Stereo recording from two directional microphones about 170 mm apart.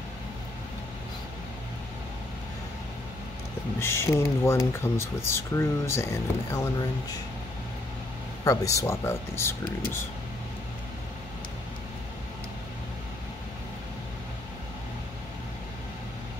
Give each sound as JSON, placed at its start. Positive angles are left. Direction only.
{"t": 3.8, "sound": "speech", "side_deg": 15}
{"t": 8.5, "sound": "speech", "side_deg": 20}